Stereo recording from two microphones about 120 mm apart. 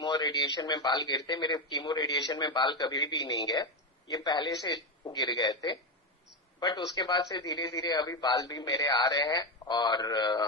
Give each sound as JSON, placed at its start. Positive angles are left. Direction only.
{"t": 0.0, "sound": "a man's voice", "side_deg": 35}